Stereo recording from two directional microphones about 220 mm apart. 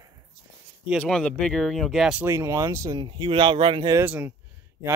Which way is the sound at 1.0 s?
5° left (ahead or behind).